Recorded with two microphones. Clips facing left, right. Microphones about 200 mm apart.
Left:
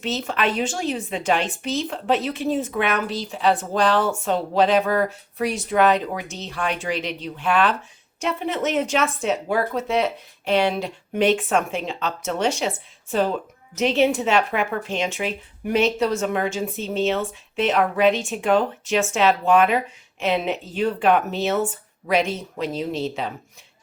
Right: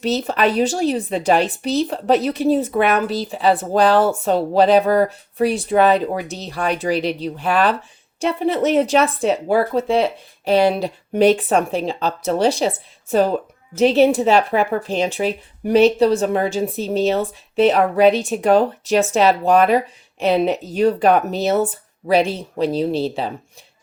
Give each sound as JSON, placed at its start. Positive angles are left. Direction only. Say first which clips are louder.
{"t": 0.0, "sound": "speech", "louder": "right 6 dB", "side_deg": -40}